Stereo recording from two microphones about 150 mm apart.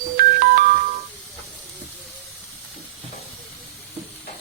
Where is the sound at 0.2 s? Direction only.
70° right (ahead or behind).